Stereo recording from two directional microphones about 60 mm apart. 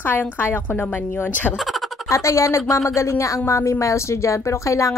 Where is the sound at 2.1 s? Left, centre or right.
Left.